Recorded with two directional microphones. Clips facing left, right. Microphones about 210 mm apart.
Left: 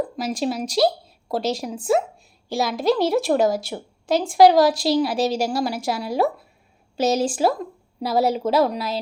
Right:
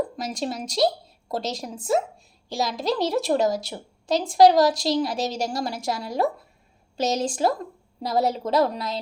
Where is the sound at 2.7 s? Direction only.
55° left (ahead or behind).